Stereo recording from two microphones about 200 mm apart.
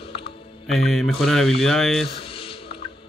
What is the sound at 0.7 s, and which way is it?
Speech, centre (ahead or behind).